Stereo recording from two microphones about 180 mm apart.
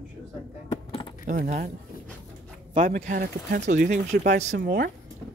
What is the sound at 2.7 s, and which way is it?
Speech, 45° right (ahead or behind).